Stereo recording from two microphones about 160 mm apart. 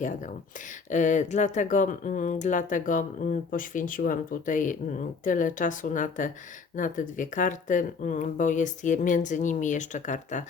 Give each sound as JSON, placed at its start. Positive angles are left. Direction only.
{"t": 0.9, "sound": "speech", "side_deg": 50}